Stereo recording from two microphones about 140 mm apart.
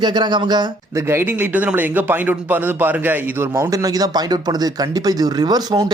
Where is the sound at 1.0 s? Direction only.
15° right (ahead or behind).